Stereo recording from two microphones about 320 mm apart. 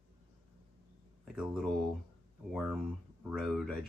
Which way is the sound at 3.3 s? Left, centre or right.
Centre.